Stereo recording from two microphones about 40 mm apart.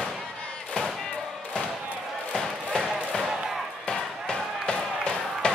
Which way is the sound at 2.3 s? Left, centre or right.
Centre.